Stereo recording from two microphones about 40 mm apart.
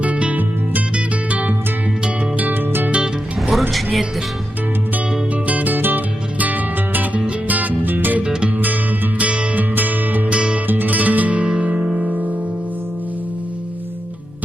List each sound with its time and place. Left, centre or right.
0.0 s music: right
2.4 s music: right
2.9 s music: right
3.7 s music: centre
5.5 s music: right
8.2 s music: right
8.4 s music: right
9.6 s music: right
10.2 s music: right
10.7 s music: right
11.4 s music: right
11.9 s music: centre